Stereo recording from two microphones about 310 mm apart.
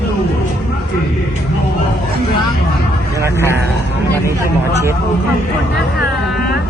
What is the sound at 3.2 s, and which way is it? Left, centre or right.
Speech, centre.